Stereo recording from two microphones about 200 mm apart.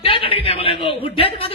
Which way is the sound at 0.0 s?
30° left (ahead or behind).